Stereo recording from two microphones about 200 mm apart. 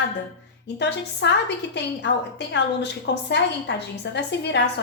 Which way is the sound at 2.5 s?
60° left (ahead or behind).